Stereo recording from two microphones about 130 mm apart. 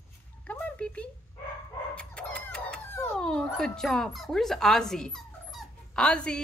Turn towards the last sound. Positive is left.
turn(degrees=5)  # may be behind; listen again after turning